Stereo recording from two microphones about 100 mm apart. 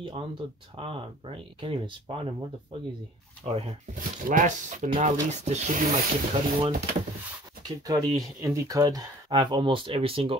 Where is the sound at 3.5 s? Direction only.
75° right (ahead or behind).